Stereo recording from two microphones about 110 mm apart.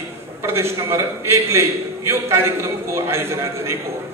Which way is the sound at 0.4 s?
25° right (ahead or behind).